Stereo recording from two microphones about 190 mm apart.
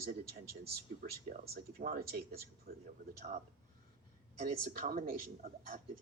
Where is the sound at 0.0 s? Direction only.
50° right (ahead or behind).